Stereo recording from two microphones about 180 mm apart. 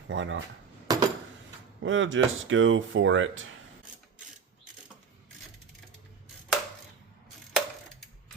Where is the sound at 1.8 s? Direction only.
90° right.